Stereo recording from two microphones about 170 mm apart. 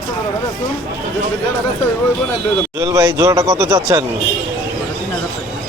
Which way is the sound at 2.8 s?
20° right (ahead or behind).